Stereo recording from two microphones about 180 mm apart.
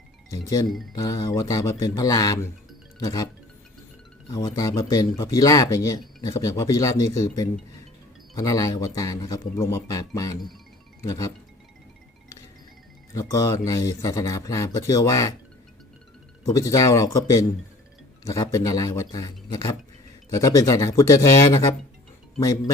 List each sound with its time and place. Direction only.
0.3 s speech: 20° left (ahead or behind)
4.3 s speech: 20° left (ahead or behind)
13.1 s speech: 20° left (ahead or behind)
16.5 s speech: 20° left (ahead or behind)